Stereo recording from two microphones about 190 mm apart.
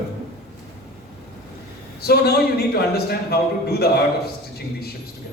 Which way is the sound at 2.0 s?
55° left (ahead or behind).